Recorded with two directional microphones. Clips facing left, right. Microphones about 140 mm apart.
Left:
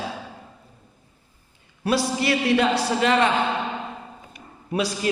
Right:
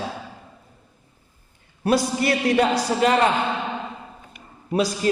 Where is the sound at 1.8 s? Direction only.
45° right (ahead or behind).